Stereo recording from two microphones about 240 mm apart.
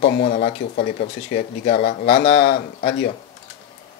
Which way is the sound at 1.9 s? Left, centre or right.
Left.